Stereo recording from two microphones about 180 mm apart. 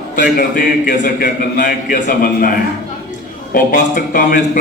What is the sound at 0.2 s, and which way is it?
Speech, 50° left (ahead or behind).